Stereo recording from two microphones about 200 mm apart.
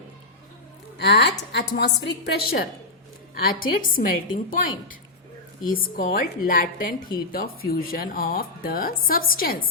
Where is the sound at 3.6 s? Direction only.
80° left.